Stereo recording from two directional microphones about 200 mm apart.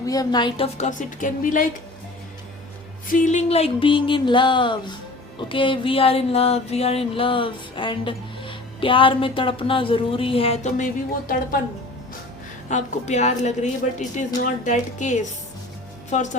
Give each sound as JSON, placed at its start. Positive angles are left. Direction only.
{"t": 0.0, "sound": "music", "side_deg": 20}
{"t": 3.1, "sound": "music", "side_deg": 35}
{"t": 12.7, "sound": "a woman's voice", "side_deg": 35}